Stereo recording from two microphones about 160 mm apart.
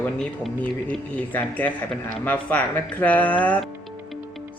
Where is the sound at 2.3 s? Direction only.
10° left (ahead or behind).